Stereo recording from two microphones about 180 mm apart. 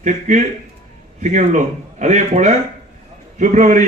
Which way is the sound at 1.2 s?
45° right (ahead or behind).